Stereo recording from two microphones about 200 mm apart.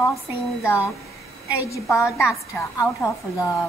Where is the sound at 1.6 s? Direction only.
15° left (ahead or behind).